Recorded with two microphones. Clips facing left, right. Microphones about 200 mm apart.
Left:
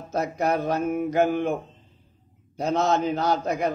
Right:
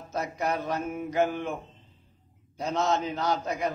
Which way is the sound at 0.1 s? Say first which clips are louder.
Left 5 dB; 45° left (ahead or behind).